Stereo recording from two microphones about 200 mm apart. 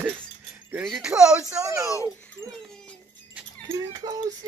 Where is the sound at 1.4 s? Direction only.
15° right (ahead or behind).